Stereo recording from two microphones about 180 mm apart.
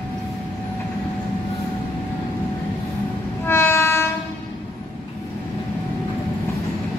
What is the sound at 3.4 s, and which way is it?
Train, 15° left (ahead or behind).